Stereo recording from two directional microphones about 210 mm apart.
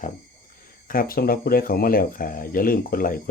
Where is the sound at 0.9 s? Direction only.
45° left (ahead or behind).